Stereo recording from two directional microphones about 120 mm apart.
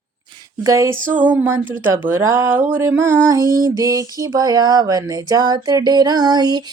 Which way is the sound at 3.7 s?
30° right (ahead or behind).